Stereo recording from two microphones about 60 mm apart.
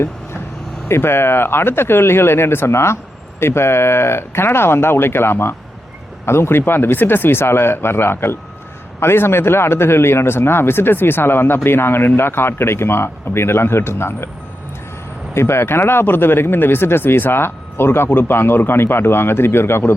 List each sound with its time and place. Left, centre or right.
0.9 s speech: left
15.4 s speech: left